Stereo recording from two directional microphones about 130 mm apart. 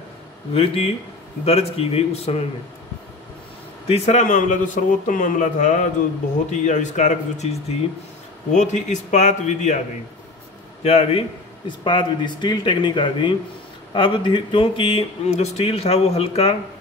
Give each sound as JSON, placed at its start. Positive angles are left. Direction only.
{"t": 0.5, "sound": "speech", "side_deg": 50}
{"t": 3.8, "sound": "a man's voice", "side_deg": 55}
{"t": 8.5, "sound": "a man's voice", "side_deg": 65}
{"t": 10.8, "sound": "a man's voice", "side_deg": 50}